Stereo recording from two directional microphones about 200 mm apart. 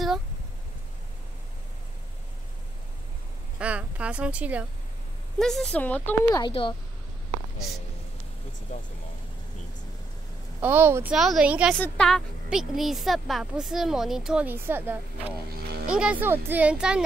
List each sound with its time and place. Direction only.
3.5 s a sound: 5° right (ahead or behind)
5.4 s a woman's voice: centre (ahead or behind)
6.3 s a woman's voice: 25° left (ahead or behind)
10.6 s a woman's voice: 10° right (ahead or behind)
15.5 s speech: 50° right (ahead or behind)
15.9 s speech: 5° right (ahead or behind)